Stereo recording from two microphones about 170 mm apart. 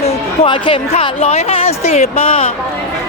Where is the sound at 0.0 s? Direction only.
30° left (ahead or behind).